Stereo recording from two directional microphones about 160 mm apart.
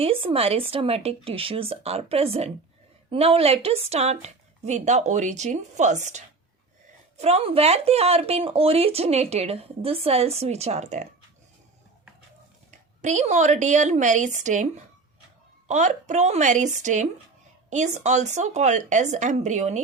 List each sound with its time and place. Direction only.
0.0 s a woman's voice: 35° right (ahead or behind)
12.7 s a woman's voice: 50° right (ahead or behind)